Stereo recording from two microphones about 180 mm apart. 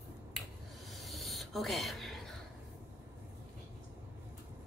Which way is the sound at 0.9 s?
Centre (ahead or behind).